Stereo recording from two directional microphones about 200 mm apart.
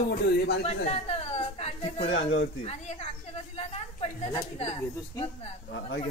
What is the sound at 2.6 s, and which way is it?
Speech, 30° left (ahead or behind).